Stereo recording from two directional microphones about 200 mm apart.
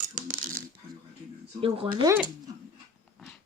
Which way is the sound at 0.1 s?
40° right (ahead or behind).